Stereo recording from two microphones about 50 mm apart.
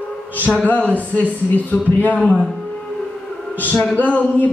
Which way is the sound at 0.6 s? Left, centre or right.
Left.